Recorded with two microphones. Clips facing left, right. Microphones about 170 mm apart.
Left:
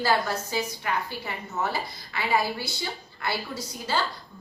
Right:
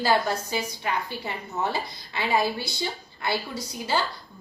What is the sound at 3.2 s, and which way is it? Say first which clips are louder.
Speech: right 2 dB; 15° right (ahead or behind).